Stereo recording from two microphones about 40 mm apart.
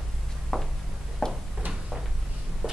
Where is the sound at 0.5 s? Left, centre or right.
Centre.